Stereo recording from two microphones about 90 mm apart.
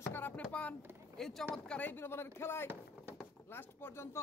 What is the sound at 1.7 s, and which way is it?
Speech, 20° left (ahead or behind).